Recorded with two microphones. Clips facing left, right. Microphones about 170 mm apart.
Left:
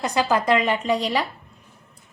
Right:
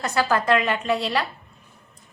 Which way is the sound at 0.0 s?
15° left (ahead or behind).